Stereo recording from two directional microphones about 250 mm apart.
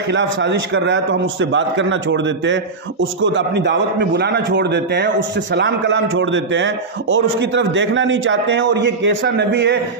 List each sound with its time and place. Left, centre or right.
0.1 s a man's voice: right